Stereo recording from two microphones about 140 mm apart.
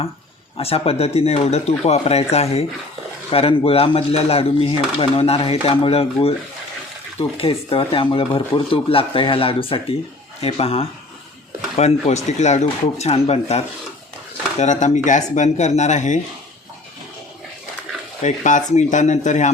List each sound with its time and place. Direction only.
0.5 s speech: 45° left (ahead or behind)
14.6 s speech: 55° left (ahead or behind)
18.2 s speech: 60° left (ahead or behind)